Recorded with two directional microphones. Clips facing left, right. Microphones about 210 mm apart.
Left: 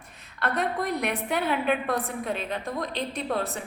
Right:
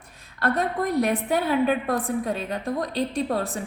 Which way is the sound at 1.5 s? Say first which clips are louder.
Right 3 dB; 40° right (ahead or behind).